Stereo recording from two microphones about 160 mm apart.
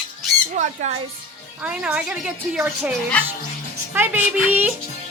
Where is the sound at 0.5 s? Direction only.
50° right (ahead or behind).